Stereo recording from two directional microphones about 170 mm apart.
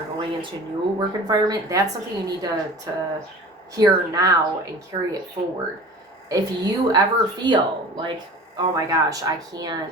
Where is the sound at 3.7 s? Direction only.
20° right (ahead or behind).